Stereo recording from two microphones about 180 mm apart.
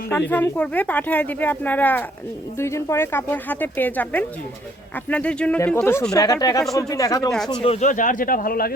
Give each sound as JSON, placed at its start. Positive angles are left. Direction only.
{"t": 0.3, "sound": "speech", "side_deg": 10}
{"t": 7.3, "sound": "speech", "side_deg": 0}
{"t": 7.6, "sound": "speech", "side_deg": 35}